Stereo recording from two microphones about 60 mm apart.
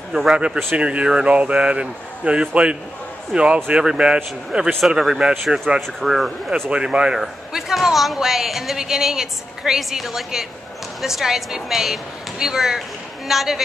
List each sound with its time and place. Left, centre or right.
0.1 s speech: centre
0.7 s speech: centre
6.7 s speech: centre